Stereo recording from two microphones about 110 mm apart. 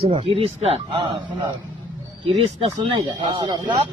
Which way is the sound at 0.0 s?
60° right (ahead or behind).